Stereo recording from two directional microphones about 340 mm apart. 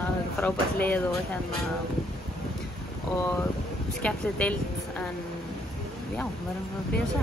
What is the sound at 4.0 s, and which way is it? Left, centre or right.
Speech, centre.